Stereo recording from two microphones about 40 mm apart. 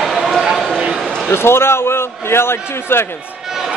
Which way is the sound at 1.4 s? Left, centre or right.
Left.